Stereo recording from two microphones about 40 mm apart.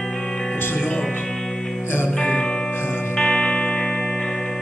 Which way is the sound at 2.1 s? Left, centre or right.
Left.